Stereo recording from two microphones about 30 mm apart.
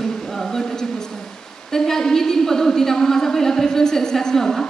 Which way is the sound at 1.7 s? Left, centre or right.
Centre.